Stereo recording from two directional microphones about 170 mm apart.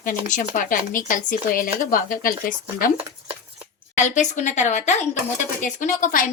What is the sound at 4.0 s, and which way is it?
A woman's voice, 45° left (ahead or behind).